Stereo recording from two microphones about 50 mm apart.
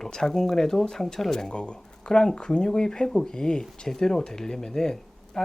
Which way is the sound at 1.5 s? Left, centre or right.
Centre.